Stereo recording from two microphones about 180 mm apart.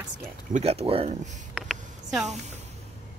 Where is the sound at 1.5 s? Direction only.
Centre (ahead or behind).